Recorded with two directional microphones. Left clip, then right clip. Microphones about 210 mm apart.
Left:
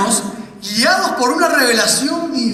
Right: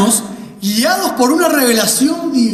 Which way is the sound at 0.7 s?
55° right (ahead or behind).